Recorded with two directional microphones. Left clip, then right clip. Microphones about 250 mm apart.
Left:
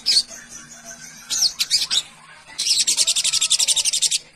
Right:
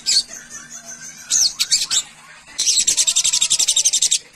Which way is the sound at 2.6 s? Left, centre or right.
Centre.